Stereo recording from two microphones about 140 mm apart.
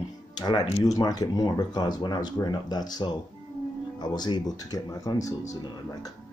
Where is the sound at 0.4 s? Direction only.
30° left (ahead or behind).